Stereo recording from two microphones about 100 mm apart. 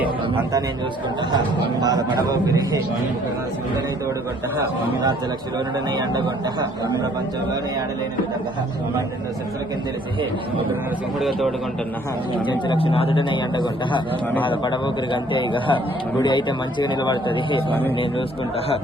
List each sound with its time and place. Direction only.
1.8 s a man's voice: 40° right (ahead or behind)
6.0 s speech: 45° right (ahead or behind)
11.2 s a man's voice: centre (ahead or behind)
12.5 s a man's voice: 60° left (ahead or behind)